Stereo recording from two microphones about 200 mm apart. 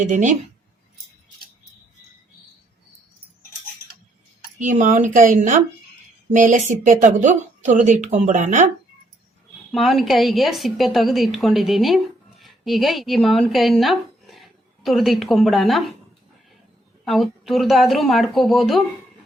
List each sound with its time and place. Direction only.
0.0 s speech: 40° right (ahead or behind)
4.6 s speech: 40° right (ahead or behind)
9.7 s a woman's voice: centre (ahead or behind)
17.1 s a woman's voice: centre (ahead or behind)